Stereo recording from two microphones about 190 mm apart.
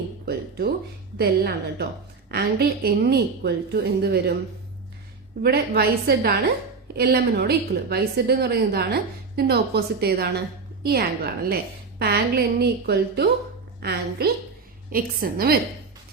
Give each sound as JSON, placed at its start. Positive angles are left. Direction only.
{"t": 0.3, "sound": "a sound", "side_deg": -55}
{"t": 1.2, "sound": "a woman's voice", "side_deg": -55}
{"t": 5.4, "sound": "a woman's voice", "side_deg": -55}